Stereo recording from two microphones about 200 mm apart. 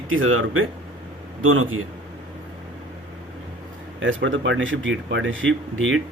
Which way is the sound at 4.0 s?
70° right (ahead or behind).